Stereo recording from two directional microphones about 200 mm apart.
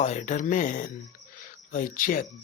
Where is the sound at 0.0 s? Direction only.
35° left (ahead or behind).